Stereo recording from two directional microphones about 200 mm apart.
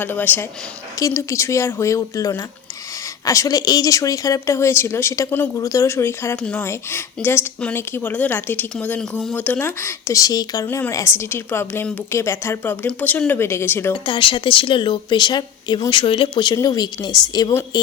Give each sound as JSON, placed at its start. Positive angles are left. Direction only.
{"t": 0.0, "sound": "a woman's voice", "side_deg": 10}
{"t": 13.9, "sound": "speech", "side_deg": 25}